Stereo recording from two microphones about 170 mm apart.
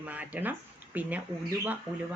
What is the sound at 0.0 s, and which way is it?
Speech, 10° right (ahead or behind).